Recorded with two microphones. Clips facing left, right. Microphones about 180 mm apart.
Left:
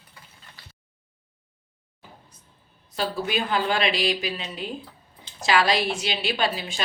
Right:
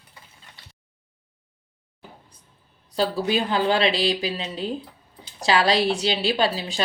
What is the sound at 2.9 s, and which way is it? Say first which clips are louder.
Speech: right 4 dB; 35° right (ahead or behind).